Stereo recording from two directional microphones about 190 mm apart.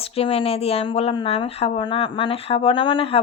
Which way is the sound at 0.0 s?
30° left (ahead or behind).